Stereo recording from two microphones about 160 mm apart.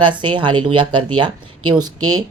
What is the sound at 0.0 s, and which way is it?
Speech, 30° right (ahead or behind).